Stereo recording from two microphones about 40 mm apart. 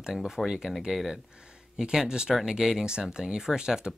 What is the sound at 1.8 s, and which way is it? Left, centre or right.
Speech, centre.